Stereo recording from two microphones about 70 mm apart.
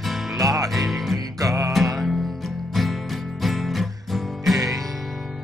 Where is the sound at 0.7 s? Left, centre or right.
Centre.